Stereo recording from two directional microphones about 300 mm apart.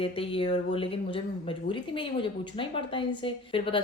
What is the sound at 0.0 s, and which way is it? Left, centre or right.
Speech, centre.